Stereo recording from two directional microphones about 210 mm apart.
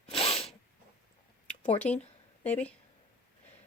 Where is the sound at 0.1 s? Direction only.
30° left (ahead or behind).